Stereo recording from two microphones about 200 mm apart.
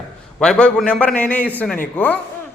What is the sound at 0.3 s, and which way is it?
A man's voice, 5° left (ahead or behind).